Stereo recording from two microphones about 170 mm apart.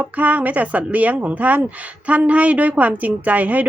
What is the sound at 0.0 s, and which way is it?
Speech, 10° right (ahead or behind).